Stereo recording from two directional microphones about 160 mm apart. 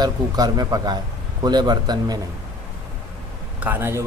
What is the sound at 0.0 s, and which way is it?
Speech, 25° right (ahead or behind).